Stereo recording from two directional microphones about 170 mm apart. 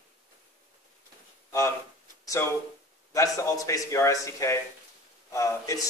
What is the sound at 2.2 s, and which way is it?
A man's voice, 15° left (ahead or behind).